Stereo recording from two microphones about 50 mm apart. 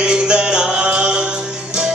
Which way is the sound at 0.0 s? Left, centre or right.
Centre.